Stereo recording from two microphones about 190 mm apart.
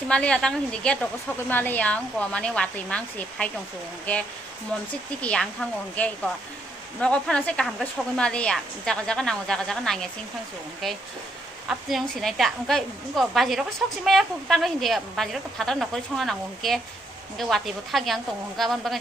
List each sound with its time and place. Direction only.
0.1 s a woman's voice: 5° left (ahead or behind)